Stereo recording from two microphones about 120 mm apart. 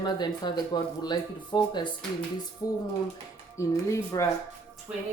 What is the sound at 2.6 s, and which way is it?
Speech, 30° left (ahead or behind).